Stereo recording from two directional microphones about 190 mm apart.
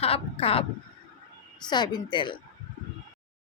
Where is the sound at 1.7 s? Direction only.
20° left (ahead or behind).